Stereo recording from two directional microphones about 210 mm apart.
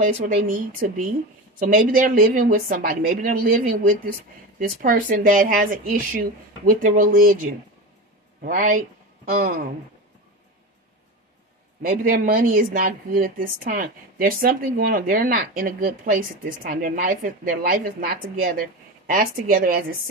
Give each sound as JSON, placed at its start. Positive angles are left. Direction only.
{"t": 0.0, "sound": "speech", "side_deg": -40}
{"t": 8.5, "sound": "speech", "side_deg": -40}
{"t": 11.8, "sound": "a woman's voice", "side_deg": -40}